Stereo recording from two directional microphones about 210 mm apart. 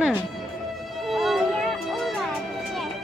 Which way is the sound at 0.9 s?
Centre (ahead or behind).